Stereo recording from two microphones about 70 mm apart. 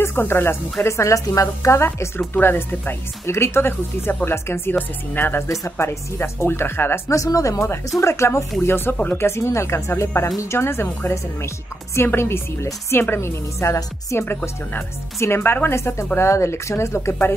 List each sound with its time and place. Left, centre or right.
0.0 s speech: left
0.8 s speech: left
2.3 s speech: left
5.5 s speech: left
7.2 s speech: left